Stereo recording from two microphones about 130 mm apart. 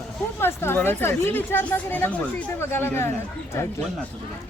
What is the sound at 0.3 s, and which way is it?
Speech, 15° left (ahead or behind).